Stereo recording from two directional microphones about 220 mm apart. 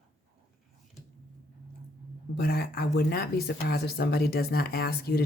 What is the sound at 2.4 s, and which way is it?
Speech, 45° left (ahead or behind).